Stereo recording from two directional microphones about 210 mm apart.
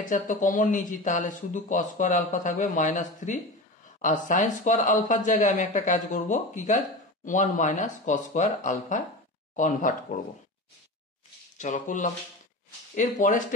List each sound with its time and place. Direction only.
0.1 s speech: 40° left (ahead or behind)
11.5 s speech: 35° left (ahead or behind)